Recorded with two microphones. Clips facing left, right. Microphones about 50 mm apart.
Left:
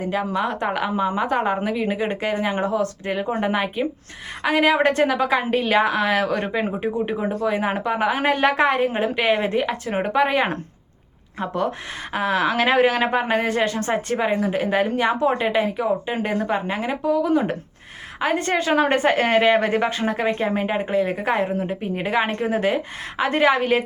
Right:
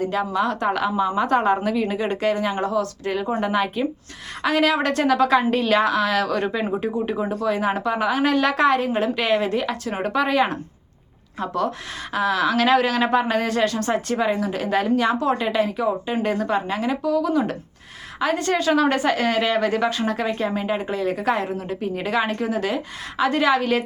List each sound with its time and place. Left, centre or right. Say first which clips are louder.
0.0 s a woman's voice: right 1 dB; centre